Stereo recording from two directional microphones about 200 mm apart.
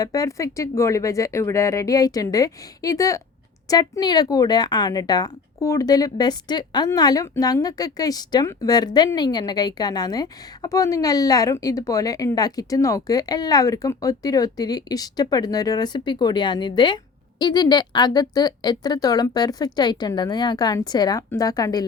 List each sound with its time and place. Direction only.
0.0 s speech: 15° left (ahead or behind)